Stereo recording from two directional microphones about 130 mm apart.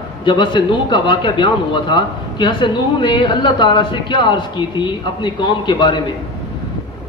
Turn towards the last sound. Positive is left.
turn(degrees=35)  # may be behind; listen again after turning